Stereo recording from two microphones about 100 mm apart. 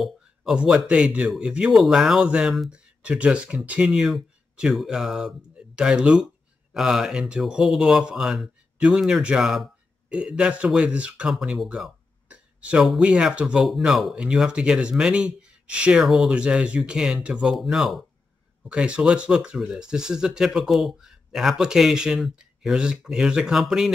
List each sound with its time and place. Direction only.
0.0 s speech: 5° right (ahead or behind)
12.3 s a sound: 10° right (ahead or behind)
13.0 s speech: 10° right (ahead or behind)